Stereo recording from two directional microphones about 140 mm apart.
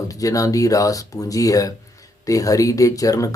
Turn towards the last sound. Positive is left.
turn(degrees=25)  # may be behind; listen again after turning